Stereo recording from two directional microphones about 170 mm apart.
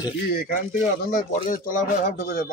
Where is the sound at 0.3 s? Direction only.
60° left (ahead or behind).